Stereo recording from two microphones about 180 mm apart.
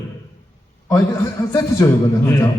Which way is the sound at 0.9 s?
20° left (ahead or behind).